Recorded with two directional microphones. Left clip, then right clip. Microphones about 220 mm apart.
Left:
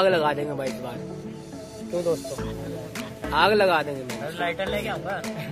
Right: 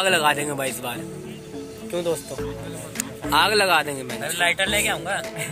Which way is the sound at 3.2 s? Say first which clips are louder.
Right 1 dB; 10° right (ahead or behind).